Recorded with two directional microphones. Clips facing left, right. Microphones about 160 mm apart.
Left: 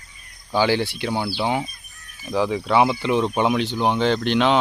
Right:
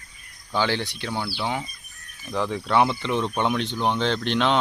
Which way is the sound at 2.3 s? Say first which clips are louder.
Left 3 dB; 5° left (ahead or behind).